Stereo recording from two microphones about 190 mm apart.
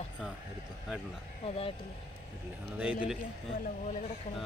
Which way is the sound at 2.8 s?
10° right (ahead or behind).